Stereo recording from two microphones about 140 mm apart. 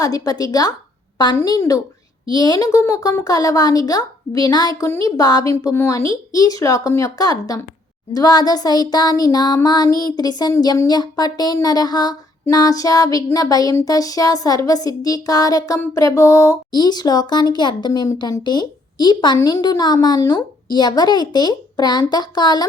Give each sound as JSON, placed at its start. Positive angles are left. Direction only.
{"t": 0.0, "sound": "speech", "side_deg": 25}